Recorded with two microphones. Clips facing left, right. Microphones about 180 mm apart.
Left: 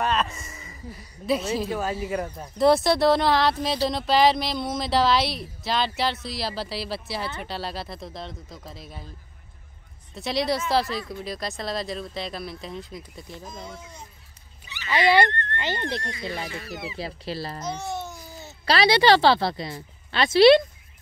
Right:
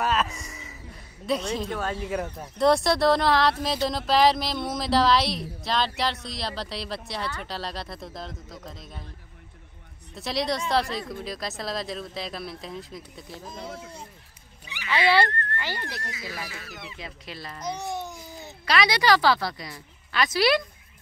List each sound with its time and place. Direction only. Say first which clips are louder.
0.0 s a sound: left 1 dB; 5° right (ahead or behind)
1.2 s speech: left 2 dB; 5° left (ahead or behind)
10.1 s speech: left 2 dB; centre (ahead or behind)
15.2 s speech: left 2 dB; 5° right (ahead or behind)
15.5 s speech: left 5 dB; 20° left (ahead or behind)
16.0 s speech: left 5 dB; 5° right (ahead or behind)
16.9 s speech: left 8 dB; 35° left (ahead or behind)
17.6 s babbling: left 1 dB; 15° right (ahead or behind)
18.7 s speech: left 4 dB; 30° left (ahead or behind)